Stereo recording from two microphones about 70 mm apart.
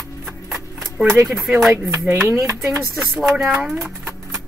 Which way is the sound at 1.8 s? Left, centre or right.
Right.